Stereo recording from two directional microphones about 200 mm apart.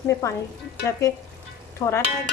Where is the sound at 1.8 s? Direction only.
20° left (ahead or behind).